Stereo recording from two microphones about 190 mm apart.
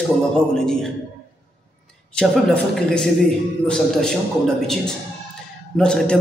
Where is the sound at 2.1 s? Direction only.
5° left (ahead or behind).